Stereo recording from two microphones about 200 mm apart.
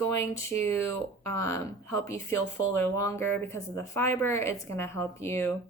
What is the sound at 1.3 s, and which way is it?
Speech, 15° left (ahead or behind).